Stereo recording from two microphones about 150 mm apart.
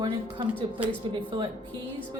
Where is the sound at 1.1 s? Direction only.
30° right (ahead or behind).